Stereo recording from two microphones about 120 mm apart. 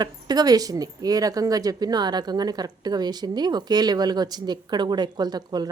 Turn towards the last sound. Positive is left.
turn(degrees=-35)  # may be behind; listen again after turning